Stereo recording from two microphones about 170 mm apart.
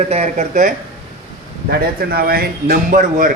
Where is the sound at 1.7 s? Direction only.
65° right (ahead or behind).